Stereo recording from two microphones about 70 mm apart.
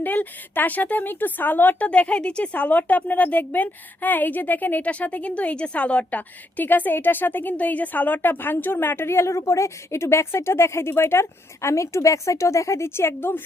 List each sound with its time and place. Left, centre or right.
0.0 s speech: left